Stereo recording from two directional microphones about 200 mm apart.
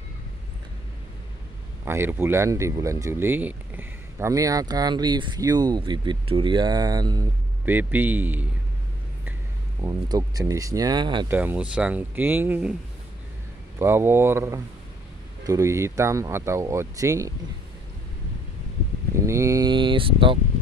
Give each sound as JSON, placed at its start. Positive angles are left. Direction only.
{"t": 1.9, "sound": "speech", "side_deg": -10}
{"t": 7.6, "sound": "speech", "side_deg": -10}
{"t": 9.8, "sound": "speech", "side_deg": -20}
{"t": 11.2, "sound": "speech", "side_deg": -10}
{"t": 13.7, "sound": "speech", "side_deg": -10}
{"t": 19.2, "sound": "speech", "side_deg": -15}